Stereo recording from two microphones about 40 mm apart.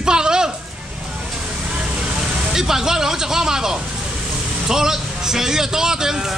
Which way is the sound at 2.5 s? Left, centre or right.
Centre.